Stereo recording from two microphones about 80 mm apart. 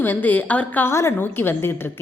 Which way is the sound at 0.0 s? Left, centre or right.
Left.